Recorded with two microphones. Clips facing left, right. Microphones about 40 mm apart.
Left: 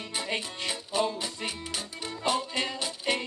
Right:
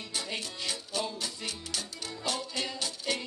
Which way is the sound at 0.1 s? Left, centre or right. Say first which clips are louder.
Left 4 dB; left.